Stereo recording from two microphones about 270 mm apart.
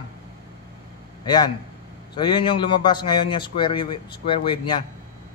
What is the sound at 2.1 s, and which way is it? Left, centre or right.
A man's voice, centre.